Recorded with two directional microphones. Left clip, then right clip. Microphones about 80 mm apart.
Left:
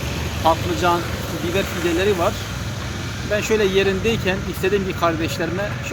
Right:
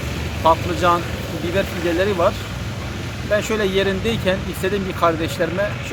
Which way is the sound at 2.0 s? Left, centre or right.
Right.